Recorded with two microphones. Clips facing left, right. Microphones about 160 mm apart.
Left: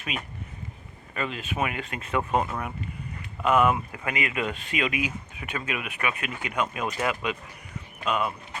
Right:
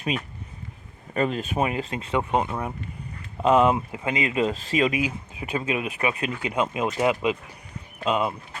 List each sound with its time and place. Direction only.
0.1 s speech: 35° right (ahead or behind)
2.0 s speech: 20° right (ahead or behind)